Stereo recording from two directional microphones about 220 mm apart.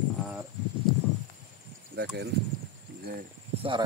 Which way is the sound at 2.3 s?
50° right (ahead or behind).